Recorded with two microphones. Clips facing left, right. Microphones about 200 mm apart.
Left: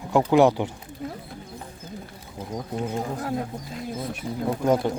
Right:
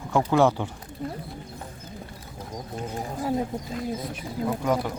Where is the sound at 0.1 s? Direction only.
15° left (ahead or behind).